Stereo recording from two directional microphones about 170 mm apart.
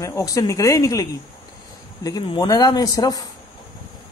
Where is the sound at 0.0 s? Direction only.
20° left (ahead or behind).